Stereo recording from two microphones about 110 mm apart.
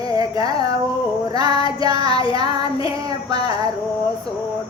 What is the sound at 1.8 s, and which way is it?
Child singing, 35° right (ahead or behind).